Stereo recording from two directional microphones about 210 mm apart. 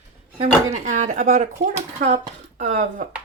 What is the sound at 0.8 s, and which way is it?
Speech, 35° right (ahead or behind).